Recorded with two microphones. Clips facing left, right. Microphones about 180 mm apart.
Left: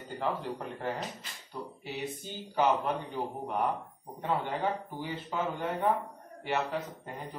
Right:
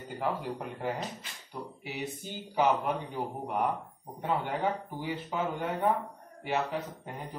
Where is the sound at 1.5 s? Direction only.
15° right (ahead or behind).